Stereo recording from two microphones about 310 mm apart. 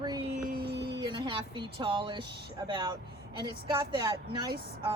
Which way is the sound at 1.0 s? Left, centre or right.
Centre.